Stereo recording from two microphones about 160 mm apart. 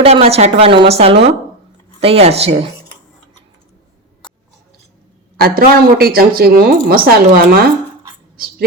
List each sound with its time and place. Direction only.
0.0 s a woman's voice: 40° right (ahead or behind)
5.4 s a woman's voice: 70° right (ahead or behind)